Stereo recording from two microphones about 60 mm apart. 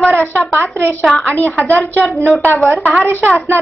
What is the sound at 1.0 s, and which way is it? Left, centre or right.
A woman's voice, centre.